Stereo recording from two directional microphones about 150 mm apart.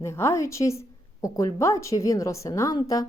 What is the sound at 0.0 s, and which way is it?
A woman's voice, 20° left (ahead or behind).